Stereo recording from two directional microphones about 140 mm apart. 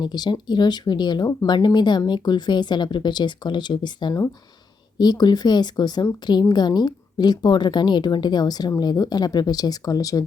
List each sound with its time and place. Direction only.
0.0 s a woman's voice: 30° left (ahead or behind)